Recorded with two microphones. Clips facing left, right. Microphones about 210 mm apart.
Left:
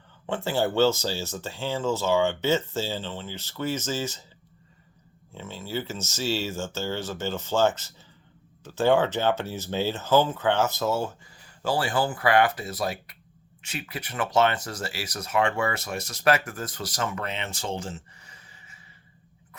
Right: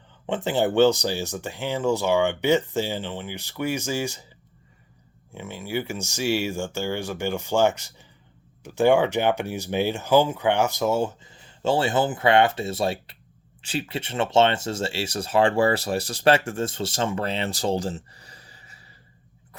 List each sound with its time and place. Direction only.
0.3 s speech: 20° right (ahead or behind)
5.3 s speech: 15° right (ahead or behind); by 18.9 s 35° right (ahead or behind)